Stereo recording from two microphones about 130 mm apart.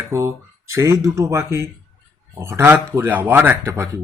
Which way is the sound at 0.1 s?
20° right (ahead or behind).